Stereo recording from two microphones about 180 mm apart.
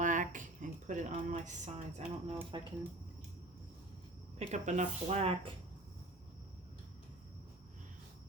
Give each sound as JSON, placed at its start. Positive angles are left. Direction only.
{"t": 0.0, "sound": "a sound", "side_deg": -45}
{"t": 2.5, "sound": "speech", "side_deg": -25}
{"t": 4.4, "sound": "speech", "side_deg": -40}